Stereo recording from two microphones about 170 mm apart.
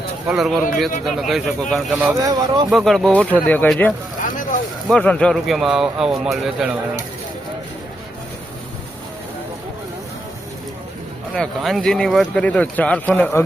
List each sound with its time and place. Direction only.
0.3 s speech: centre (ahead or behind)
2.1 s speech: 20° right (ahead or behind)
2.6 s speech: centre (ahead or behind)
4.2 s boat: 50° left (ahead or behind)
4.9 s speech: 5° left (ahead or behind)
11.3 s speech: centre (ahead or behind)